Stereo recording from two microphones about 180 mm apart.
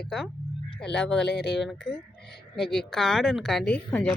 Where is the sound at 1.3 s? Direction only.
70° left (ahead or behind).